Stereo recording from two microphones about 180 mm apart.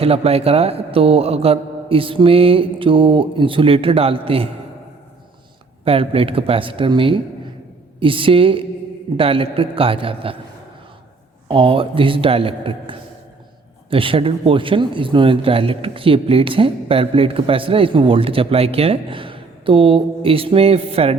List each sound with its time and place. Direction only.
0.0 s speech: 35° right (ahead or behind)
5.8 s a man's voice: 30° right (ahead or behind)
11.4 s a man's voice: 30° right (ahead or behind)